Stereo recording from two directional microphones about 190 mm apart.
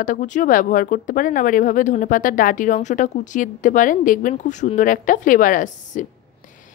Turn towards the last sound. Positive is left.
turn(degrees=45)  # may be behind; listen again after turning